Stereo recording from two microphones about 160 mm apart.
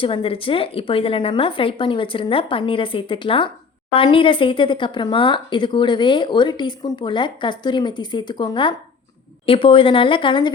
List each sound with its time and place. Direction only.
0.0 s a woman's voice: 35° left (ahead or behind)